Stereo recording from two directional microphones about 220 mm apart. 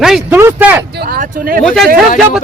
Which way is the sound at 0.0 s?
5° right (ahead or behind).